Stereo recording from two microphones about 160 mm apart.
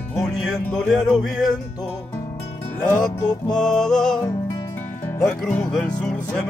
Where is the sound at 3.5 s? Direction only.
5° left (ahead or behind).